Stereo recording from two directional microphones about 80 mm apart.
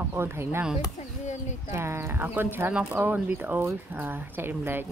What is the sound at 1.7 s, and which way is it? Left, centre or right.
Speech, right.